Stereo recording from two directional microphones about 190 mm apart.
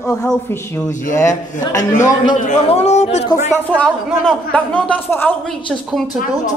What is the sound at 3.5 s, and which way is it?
A man's voice, 5° left (ahead or behind).